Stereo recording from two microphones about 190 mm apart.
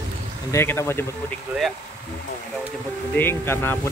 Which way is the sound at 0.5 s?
15° left (ahead or behind).